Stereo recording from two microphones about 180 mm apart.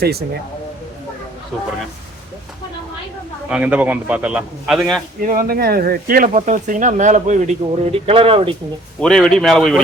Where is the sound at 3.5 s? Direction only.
10° right (ahead or behind).